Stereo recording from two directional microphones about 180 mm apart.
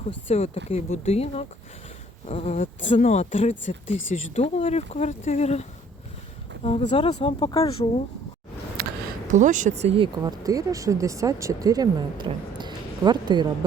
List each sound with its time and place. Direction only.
0.3 s speech: 35° left (ahead or behind)
8.8 s a sound: 60° right (ahead or behind)
9.3 s speech: 45° right (ahead or behind); by 13.5 s 25° right (ahead or behind)